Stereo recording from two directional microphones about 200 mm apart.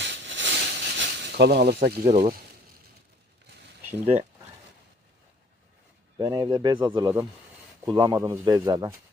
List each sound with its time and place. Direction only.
0.0 s a sound: 60° right (ahead or behind)
2.0 s speech: 35° right (ahead or behind)
3.9 s speech: 30° right (ahead or behind)
6.1 s speech: 20° right (ahead or behind)